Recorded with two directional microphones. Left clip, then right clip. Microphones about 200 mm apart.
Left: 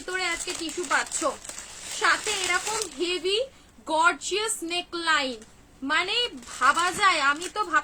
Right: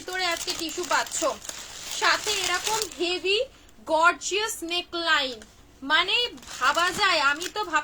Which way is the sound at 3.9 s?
20° left (ahead or behind).